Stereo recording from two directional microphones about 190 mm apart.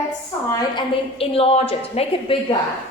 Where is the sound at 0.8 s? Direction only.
30° left (ahead or behind).